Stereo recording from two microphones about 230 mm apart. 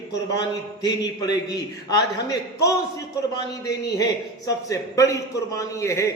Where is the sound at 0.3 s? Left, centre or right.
Centre.